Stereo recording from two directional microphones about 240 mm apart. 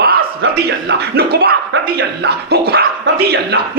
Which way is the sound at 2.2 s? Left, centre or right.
Right.